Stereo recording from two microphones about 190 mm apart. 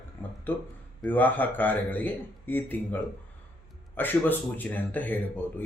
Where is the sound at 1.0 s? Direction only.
10° left (ahead or behind).